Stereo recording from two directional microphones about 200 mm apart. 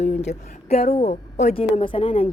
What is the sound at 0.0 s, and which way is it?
A woman's voice, 35° left (ahead or behind).